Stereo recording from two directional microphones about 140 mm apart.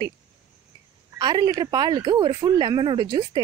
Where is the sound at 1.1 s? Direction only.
30° right (ahead or behind).